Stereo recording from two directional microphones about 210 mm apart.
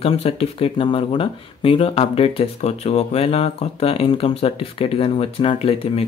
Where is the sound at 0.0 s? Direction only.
25° left (ahead or behind).